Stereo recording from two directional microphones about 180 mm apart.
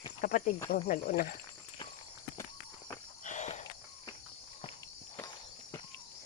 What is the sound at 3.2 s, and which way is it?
Walk, 40° left (ahead or behind).